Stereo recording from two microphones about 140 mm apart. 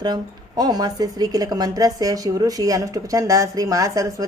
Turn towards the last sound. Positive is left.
turn(degrees=-25)  # may be behind; listen again after turning